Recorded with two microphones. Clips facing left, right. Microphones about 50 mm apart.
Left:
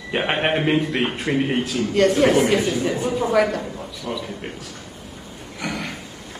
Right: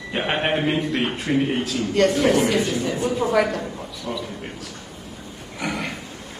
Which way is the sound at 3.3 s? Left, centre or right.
Centre.